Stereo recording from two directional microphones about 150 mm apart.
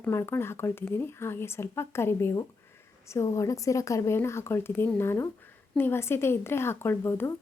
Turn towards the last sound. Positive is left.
turn(degrees=20)  # may be behind; listen again after turning